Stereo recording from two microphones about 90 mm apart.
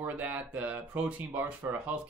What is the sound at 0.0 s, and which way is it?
Speech, 20° right (ahead or behind).